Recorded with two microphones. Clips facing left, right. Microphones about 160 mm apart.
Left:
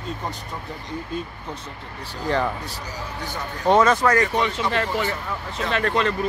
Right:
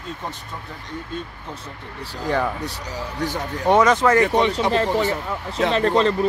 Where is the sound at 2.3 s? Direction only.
15° right (ahead or behind).